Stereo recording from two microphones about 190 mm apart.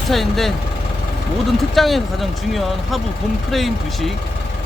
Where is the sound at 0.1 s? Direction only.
Centre (ahead or behind).